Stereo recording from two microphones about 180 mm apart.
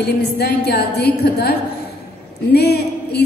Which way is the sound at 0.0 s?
65° left (ahead or behind).